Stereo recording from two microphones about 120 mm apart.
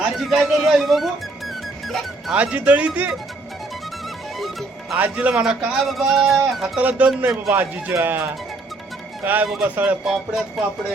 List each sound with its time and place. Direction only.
0.0 s a man's voice: centre (ahead or behind)
2.3 s speech: 10° right (ahead or behind)
4.4 s music: centre (ahead or behind)
4.9 s a man's voice: 15° right (ahead or behind)
9.5 s a man's voice: 5° right (ahead or behind)
10.0 s a man's voice: centre (ahead or behind)